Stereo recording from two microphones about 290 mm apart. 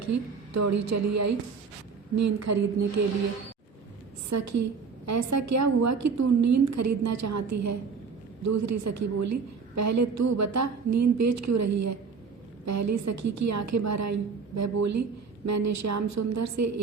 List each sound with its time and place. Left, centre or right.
0.0 s a woman's voice: right
4.3 s a woman's voice: right